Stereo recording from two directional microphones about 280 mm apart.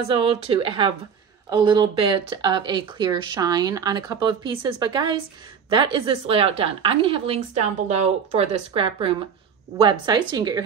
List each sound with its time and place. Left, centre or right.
0.1 s a woman's voice: centre